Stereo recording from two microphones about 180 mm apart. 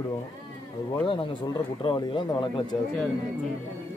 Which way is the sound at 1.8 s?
30° left (ahead or behind).